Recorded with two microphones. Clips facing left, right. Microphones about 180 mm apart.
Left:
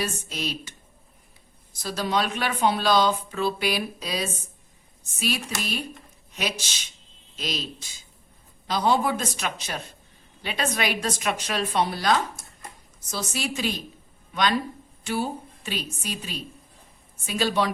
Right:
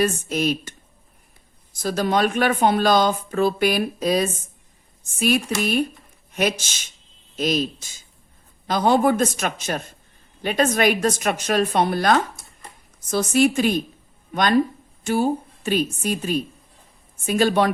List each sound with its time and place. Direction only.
0.0 s speech: 50° right (ahead or behind)
1.8 s speech: 50° right (ahead or behind)